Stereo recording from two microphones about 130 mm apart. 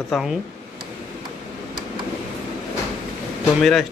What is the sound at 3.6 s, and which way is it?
Speech, centre (ahead or behind).